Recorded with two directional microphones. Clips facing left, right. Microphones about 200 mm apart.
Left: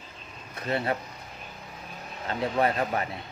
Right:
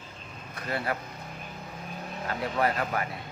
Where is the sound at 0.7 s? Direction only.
25° left (ahead or behind).